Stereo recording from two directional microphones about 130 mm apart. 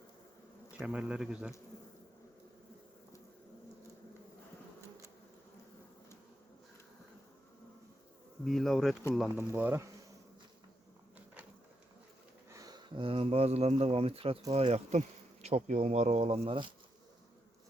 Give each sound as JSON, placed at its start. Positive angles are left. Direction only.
{"t": 0.8, "sound": "speech", "side_deg": -10}
{"t": 8.4, "sound": "bee", "side_deg": 0}
{"t": 9.3, "sound": "speech", "side_deg": -15}
{"t": 12.5, "sound": "sniff", "side_deg": -25}
{"t": 13.0, "sound": "speech", "side_deg": -45}